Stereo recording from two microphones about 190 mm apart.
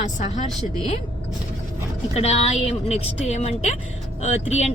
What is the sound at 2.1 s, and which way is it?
Speech, 35° left (ahead or behind).